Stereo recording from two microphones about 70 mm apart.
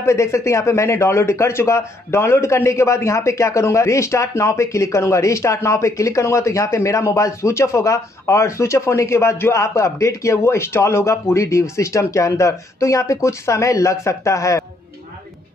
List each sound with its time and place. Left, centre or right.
0.0 s speech: left